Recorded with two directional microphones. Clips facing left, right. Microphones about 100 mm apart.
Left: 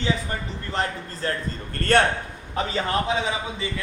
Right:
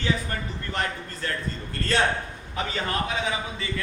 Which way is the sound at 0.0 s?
25° left (ahead or behind).